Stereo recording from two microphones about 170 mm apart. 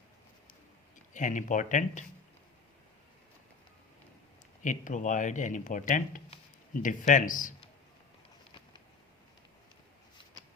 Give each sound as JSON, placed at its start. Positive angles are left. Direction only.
{"t": 1.1, "sound": "speech", "side_deg": 50}
{"t": 4.6, "sound": "speech", "side_deg": 50}